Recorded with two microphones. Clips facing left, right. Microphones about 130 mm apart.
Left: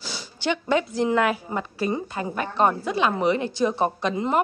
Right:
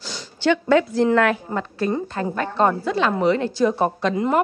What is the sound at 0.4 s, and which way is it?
A woman's voice, 20° left (ahead or behind).